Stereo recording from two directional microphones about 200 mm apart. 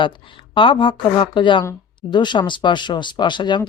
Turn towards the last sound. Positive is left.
turn(degrees=20)  # may be behind; listen again after turning